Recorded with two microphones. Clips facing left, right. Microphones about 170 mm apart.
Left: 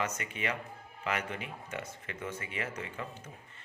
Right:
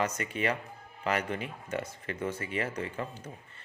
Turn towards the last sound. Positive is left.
turn(degrees=-35)  # may be behind; listen again after turning